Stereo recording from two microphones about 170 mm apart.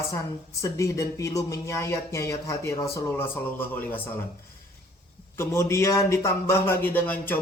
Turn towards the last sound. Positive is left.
turn(degrees=10)  # may be behind; listen again after turning